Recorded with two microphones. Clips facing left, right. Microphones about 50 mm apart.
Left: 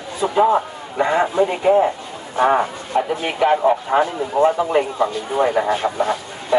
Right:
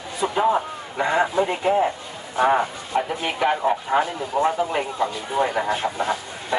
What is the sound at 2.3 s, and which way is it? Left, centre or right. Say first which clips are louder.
Speech: left 3 dB; centre.